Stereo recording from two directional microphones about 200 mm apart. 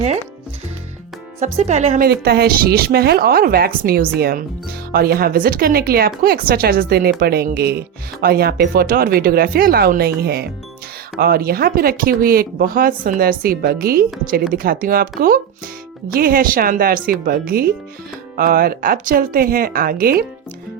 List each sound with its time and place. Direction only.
1.5 s speech: 35° right (ahead or behind)
2.0 s speech: 50° right (ahead or behind)